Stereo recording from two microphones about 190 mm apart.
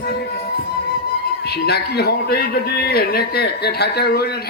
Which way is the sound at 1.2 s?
55° left (ahead or behind).